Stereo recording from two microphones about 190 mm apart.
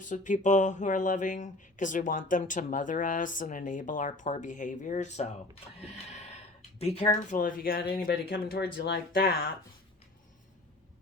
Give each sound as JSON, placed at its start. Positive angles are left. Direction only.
{"t": 0.0, "sound": "speech", "side_deg": 40}
{"t": 5.8, "sound": "a sound", "side_deg": 35}
{"t": 6.7, "sound": "speech", "side_deg": 30}
{"t": 7.3, "sound": "speech", "side_deg": 45}